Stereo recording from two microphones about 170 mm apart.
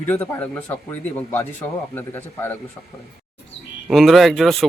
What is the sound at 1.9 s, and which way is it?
Speech, 15° left (ahead or behind).